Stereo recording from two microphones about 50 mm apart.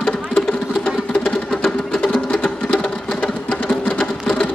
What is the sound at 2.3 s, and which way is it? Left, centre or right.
Sewing machine, centre.